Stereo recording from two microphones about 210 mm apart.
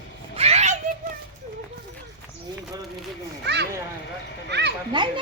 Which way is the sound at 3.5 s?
55° right (ahead or behind).